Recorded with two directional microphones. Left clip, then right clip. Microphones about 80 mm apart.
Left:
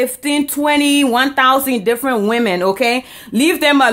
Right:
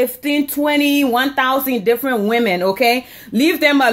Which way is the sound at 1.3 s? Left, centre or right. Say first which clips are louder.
Left 4 dB; left.